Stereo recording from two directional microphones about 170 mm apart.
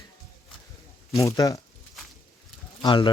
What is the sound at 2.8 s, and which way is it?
Speech, 30° left (ahead or behind).